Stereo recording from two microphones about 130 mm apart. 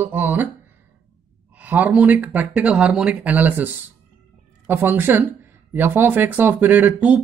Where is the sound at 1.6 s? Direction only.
10° right (ahead or behind).